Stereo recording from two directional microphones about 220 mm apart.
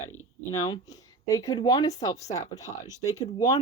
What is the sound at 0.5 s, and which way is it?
A woman's voice, 15° left (ahead or behind).